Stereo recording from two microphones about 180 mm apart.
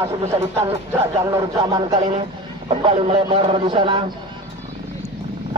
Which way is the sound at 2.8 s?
30° right (ahead or behind).